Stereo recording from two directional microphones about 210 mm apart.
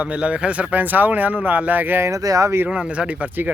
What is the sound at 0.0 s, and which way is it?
Speech, 5° right (ahead or behind).